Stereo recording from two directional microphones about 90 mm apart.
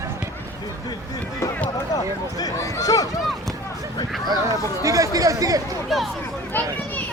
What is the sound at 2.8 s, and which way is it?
Speech, 40° left (ahead or behind).